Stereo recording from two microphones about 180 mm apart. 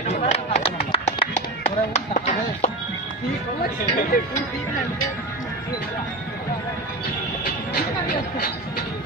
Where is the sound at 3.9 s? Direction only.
55° left (ahead or behind).